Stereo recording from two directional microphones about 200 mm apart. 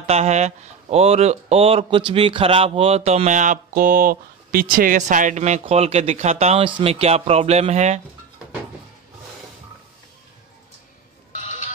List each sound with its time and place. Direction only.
0.0 s speech: 30° right (ahead or behind)
11.3 s music: 40° left (ahead or behind)